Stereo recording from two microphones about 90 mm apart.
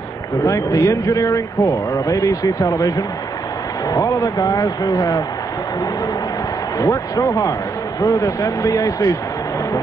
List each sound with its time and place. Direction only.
0.4 s a man's voice: 35° left (ahead or behind)
6.8 s a man's voice: 35° left (ahead or behind)